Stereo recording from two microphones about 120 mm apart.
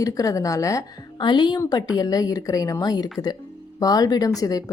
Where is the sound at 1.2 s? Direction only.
40° left (ahead or behind).